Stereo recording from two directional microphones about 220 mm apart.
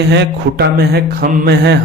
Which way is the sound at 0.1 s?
45° right (ahead or behind).